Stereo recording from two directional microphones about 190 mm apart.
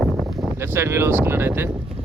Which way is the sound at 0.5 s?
15° right (ahead or behind).